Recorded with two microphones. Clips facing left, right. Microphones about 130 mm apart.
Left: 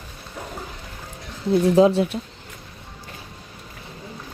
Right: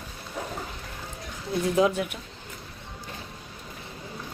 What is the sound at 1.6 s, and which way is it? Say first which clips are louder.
Speech: left 6 dB; 30° left (ahead or behind).